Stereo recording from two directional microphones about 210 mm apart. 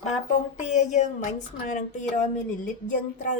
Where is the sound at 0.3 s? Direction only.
35° left (ahead or behind).